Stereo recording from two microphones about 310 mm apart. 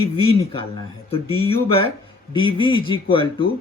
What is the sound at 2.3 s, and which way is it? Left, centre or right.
Speech, centre.